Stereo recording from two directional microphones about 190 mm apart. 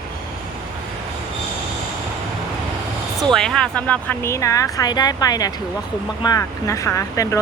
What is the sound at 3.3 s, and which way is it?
Speech, 5° left (ahead or behind).